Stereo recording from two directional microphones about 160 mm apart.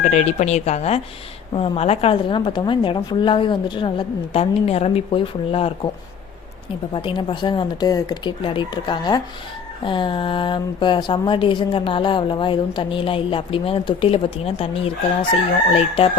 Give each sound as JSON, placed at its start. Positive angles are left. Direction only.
{"t": 0.0, "sound": "speech", "side_deg": 45}
{"t": 6.9, "sound": "speech", "side_deg": 30}